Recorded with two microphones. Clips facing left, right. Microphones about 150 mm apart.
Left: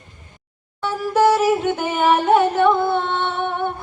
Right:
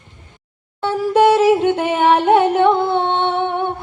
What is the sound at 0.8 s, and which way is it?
Music, 25° right (ahead or behind).